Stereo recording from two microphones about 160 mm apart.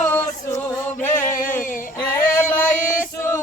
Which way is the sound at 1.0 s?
15° left (ahead or behind).